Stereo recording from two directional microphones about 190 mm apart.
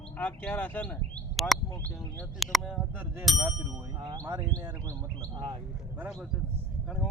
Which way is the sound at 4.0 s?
20° right (ahead or behind).